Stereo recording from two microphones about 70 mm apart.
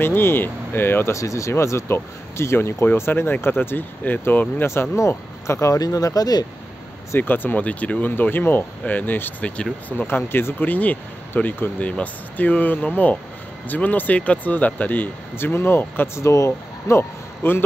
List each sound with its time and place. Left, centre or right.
0.0 s speech: left
1.1 s speech: left
4.9 s speech: left
5.8 s speech: left
7.2 s speech: left
16.2 s speech: left